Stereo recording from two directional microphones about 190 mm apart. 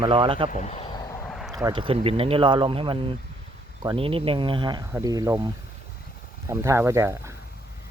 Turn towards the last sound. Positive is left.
turn(degrees=-15)  # may be behind; listen again after turning